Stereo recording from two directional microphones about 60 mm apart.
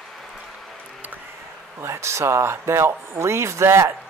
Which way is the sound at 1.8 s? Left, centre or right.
Right.